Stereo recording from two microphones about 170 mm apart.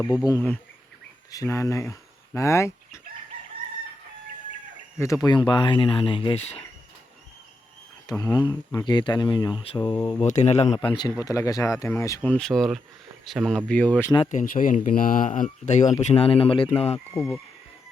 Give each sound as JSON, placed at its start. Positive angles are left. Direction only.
{"t": 0.3, "sound": "speech", "side_deg": 15}
{"t": 4.9, "sound": "speech", "side_deg": 20}
{"t": 8.0, "sound": "speech", "side_deg": 20}
{"t": 10.2, "sound": "speech", "side_deg": 40}
{"t": 10.8, "sound": "speech", "side_deg": 25}
{"t": 12.3, "sound": "speech", "side_deg": 5}
{"t": 14.3, "sound": "speech", "side_deg": 50}
{"t": 17.2, "sound": "speech", "side_deg": 15}